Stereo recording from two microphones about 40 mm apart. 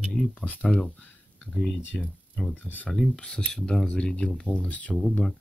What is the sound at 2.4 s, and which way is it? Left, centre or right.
Speech, left.